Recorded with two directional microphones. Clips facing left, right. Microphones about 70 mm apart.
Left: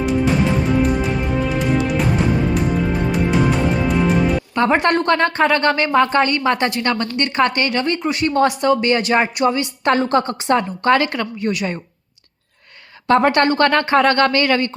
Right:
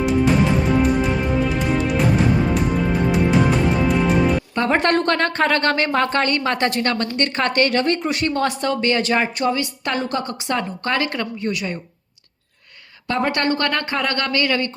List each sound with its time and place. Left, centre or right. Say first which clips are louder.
0.6 s music: even; centre
4.7 s speech: left 1 dB; centre
8.4 s speech: left 4 dB; centre
9.8 s speech: left 10 dB; left
10.6 s a woman's voice: left 5 dB; left
13.1 s speech: left 6 dB; left